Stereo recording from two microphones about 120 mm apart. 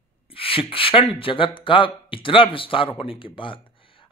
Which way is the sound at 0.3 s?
50° left (ahead or behind).